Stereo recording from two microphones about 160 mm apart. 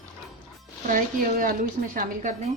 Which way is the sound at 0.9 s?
60° right (ahead or behind).